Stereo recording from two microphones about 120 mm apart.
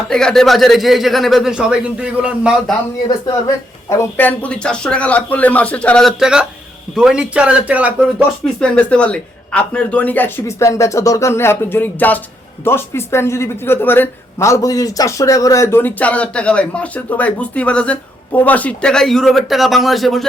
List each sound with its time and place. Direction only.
0.1 s speech: 5° left (ahead or behind)
3.1 s speech: 35° left (ahead or behind)
3.8 s speech: 15° left (ahead or behind); by 7.9 s 10° right (ahead or behind)
8.6 s speech: 10° left (ahead or behind)